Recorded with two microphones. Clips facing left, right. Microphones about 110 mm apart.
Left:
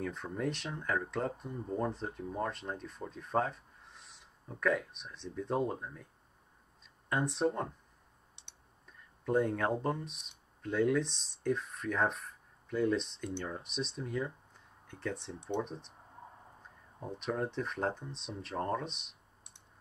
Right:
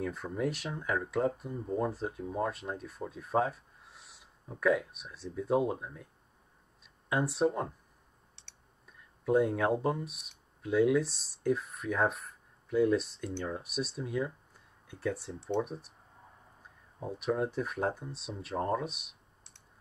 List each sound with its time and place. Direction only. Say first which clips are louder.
0.0 s speech: right 3 dB; 5° right (ahead or behind)
7.1 s speech: right 3 dB; 5° right (ahead or behind)
8.4 s typing: even; 15° left (ahead or behind)
9.2 s speech: right 3 dB; 5° right (ahead or behind)
17.0 s speech: right 4 dB; 5° right (ahead or behind)